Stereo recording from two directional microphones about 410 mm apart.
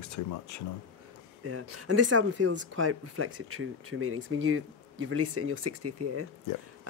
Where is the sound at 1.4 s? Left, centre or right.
Right.